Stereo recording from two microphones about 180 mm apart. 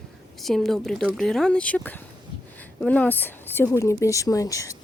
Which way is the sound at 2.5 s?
10° left (ahead or behind).